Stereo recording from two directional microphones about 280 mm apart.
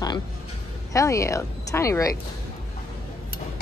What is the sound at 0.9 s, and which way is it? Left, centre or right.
Speech, centre.